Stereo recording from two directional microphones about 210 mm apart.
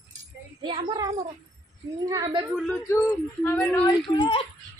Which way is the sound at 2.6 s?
10° left (ahead or behind).